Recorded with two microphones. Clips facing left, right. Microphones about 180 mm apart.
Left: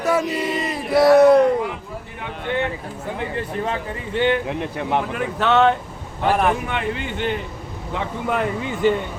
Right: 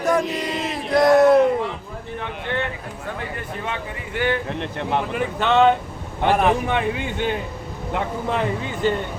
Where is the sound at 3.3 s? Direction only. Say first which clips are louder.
Left 4 dB; 30° left (ahead or behind).